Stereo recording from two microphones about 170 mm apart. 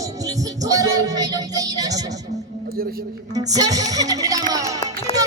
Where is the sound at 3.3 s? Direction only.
20° right (ahead or behind).